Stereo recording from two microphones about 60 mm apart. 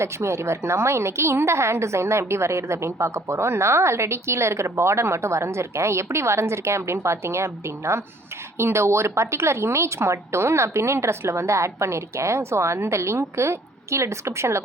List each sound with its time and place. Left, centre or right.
0.0 s a woman's voice: right